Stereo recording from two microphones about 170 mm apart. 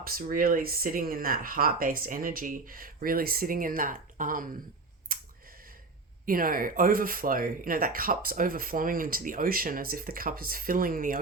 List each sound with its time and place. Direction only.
0.0 s speech: 55° right (ahead or behind)
5.1 s clicking: 60° right (ahead or behind)
6.2 s speech: 55° right (ahead or behind)